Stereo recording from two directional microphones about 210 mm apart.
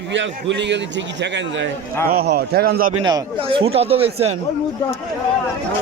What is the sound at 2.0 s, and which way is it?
Speech, 45° right (ahead or behind).